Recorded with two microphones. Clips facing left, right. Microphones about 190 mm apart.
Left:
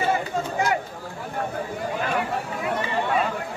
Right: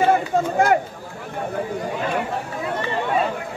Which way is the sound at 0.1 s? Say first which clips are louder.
Right 6 dB; 55° right (ahead or behind).